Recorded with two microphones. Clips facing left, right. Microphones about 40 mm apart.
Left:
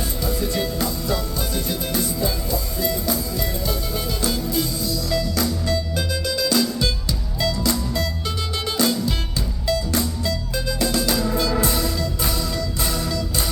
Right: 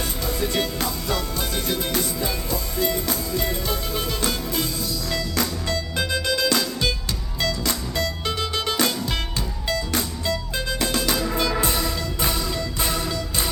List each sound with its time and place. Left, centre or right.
0.3 s music: right